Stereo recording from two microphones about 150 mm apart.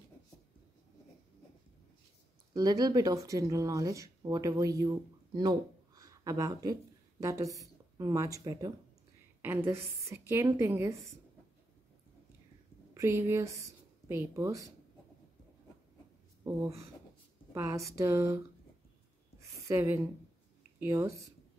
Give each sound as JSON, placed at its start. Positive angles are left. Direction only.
{"t": 2.5, "sound": "a woman's voice", "side_deg": -25}
{"t": 12.9, "sound": "speech", "side_deg": -20}
{"t": 16.4, "sound": "a woman's voice", "side_deg": -20}
{"t": 19.7, "sound": "a woman's voice", "side_deg": -15}